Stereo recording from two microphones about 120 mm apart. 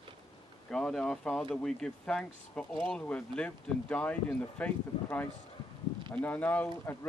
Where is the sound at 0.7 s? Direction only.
5° left (ahead or behind).